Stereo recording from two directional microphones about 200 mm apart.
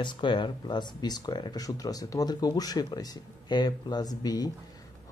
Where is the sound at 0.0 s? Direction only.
25° left (ahead or behind).